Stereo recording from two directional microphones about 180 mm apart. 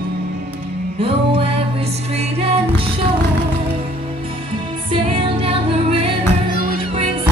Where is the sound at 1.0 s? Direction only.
30° right (ahead or behind).